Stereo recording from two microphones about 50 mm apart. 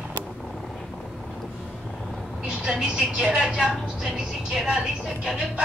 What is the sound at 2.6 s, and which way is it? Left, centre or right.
Speech, centre.